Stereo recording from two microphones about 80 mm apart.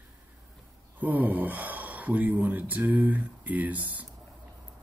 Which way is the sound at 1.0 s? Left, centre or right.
Right.